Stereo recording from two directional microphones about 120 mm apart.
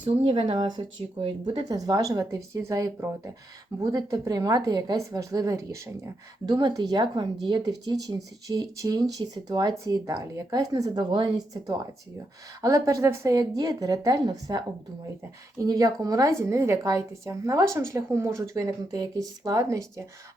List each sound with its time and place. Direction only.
0.0 s speech: 50° right (ahead or behind)
1.6 s a woman's voice: 35° right (ahead or behind)
11.1 s speech: 45° right (ahead or behind)
11.6 s a woman's voice: 25° right (ahead or behind)